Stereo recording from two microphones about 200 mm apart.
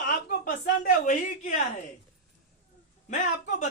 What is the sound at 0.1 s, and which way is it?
A woman's voice, 45° left (ahead or behind).